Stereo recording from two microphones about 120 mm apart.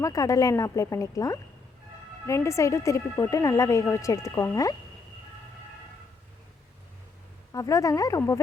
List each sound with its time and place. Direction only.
0.0 s a woman's voice: 30° left (ahead or behind)
7.5 s a woman's voice: 30° left (ahead or behind)